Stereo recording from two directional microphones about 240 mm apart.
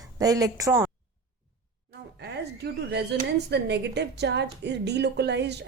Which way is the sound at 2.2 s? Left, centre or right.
Right.